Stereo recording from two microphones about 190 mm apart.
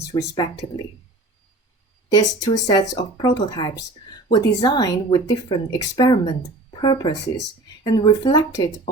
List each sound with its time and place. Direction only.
0.0 s speech: 20° left (ahead or behind)
2.1 s speech: 20° left (ahead or behind)